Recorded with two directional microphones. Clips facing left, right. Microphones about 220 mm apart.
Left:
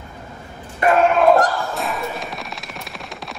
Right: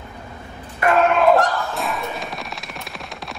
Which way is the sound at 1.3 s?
Centre (ahead or behind).